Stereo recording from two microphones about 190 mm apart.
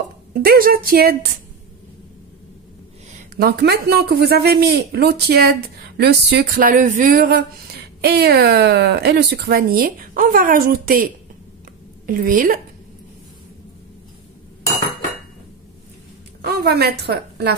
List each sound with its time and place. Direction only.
0.3 s a woman's voice: 50° right (ahead or behind)
3.3 s speech: 55° right (ahead or behind)
12.1 s a woman's voice: 50° right (ahead or behind)
16.3 s a woman's voice: 55° right (ahead or behind)